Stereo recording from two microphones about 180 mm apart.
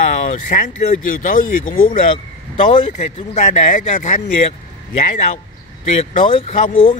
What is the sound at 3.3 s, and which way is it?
Speech, 45° left (ahead or behind).